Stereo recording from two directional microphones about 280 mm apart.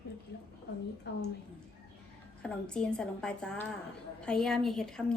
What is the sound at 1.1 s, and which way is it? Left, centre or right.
Speech, left.